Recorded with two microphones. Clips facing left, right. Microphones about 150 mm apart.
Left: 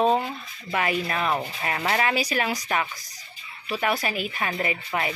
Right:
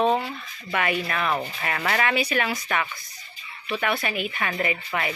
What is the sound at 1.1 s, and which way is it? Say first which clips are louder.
Speech: even; 25° left (ahead or behind).